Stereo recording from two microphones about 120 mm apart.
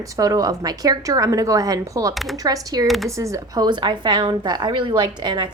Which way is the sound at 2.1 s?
Centre (ahead or behind).